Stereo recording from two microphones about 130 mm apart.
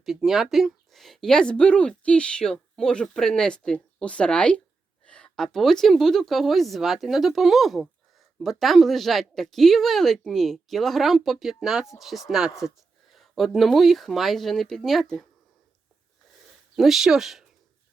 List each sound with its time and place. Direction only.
0.0 s speech: centre (ahead or behind)
16.7 s speech: centre (ahead or behind)